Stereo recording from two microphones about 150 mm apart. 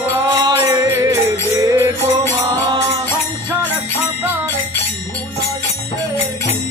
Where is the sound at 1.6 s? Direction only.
20° right (ahead or behind).